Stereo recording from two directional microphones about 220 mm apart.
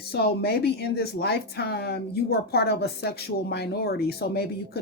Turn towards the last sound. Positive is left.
turn(degrees=45)  # may be behind; listen again after turning